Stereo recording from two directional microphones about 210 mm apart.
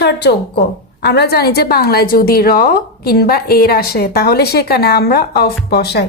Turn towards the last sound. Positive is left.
turn(degrees=50)  # may be behind; listen again after turning